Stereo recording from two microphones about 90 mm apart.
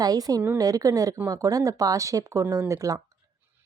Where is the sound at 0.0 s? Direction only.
45° right (ahead or behind).